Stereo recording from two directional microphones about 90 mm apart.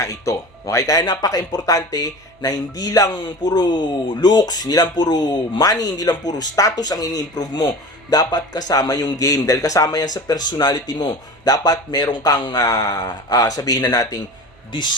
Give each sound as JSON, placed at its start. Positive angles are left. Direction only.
{"t": 0.0, "sound": "speech", "side_deg": 35}